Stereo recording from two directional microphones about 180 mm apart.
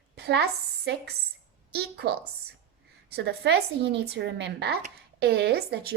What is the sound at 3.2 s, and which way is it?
Speech, 65° right (ahead or behind).